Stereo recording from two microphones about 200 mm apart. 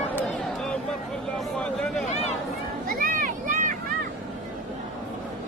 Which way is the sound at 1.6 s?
5° left (ahead or behind).